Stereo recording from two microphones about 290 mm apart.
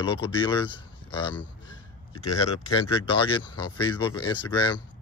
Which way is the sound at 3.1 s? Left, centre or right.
Centre.